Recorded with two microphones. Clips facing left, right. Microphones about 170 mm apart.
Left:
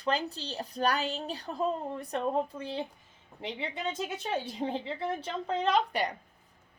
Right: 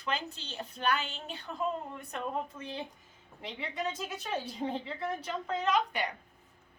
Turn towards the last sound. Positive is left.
turn(degrees=35)  # may be behind; listen again after turning